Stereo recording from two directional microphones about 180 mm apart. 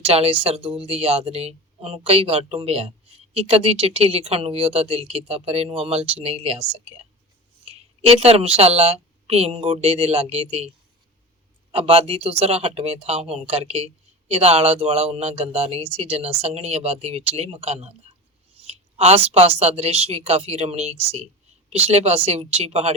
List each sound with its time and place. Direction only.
0.0 s a woman's voice: 30° right (ahead or behind)
11.7 s speech: 35° right (ahead or behind)